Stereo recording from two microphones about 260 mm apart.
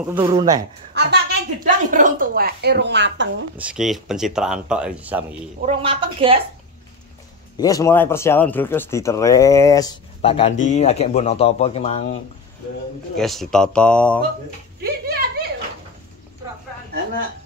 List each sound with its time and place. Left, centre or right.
0.0 s speech: centre
0.9 s a woman's voice: right
3.5 s speech: centre
5.7 s a woman's voice: right
7.5 s speech: centre
13.1 s speech: centre
14.8 s a sound: right